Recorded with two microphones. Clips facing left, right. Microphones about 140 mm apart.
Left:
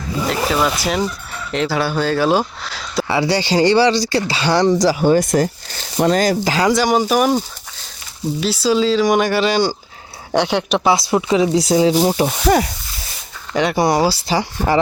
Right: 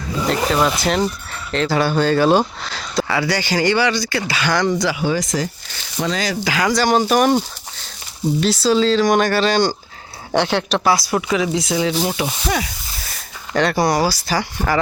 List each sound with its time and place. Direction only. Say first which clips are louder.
0.3 s speech: right 1 dB; 5° left (ahead or behind)
3.1 s speech: left 5 dB; 25° left (ahead or behind); by 6.5 s 50° left (ahead or behind)
6.5 s speech: right 1 dB; 30° left (ahead or behind)
6.7 s speech: even; 10° left (ahead or behind)
10.8 s speech: left 3 dB; 25° left (ahead or behind); by 12.7 s 45° left (ahead or behind)
13.6 s speech: left 1 dB; 15° left (ahead or behind)